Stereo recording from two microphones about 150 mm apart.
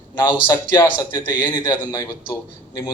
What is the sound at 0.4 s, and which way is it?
A man's voice, 20° left (ahead or behind).